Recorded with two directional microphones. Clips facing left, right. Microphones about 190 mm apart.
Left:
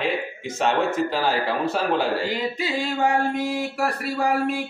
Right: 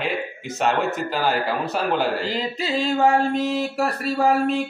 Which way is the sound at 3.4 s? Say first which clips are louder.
Right 2 dB; 25° right (ahead or behind).